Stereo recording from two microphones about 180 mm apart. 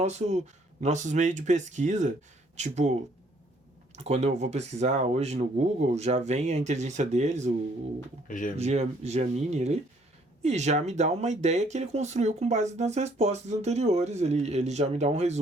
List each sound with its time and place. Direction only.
0.0 s speech: 40° right (ahead or behind)
8.3 s speech: 45° left (ahead or behind)
8.5 s speech: 35° right (ahead or behind)